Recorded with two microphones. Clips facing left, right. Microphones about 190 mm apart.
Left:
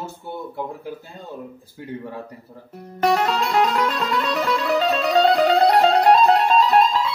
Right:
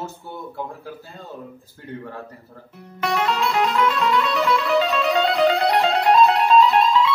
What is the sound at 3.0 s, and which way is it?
Music, 40° left (ahead or behind).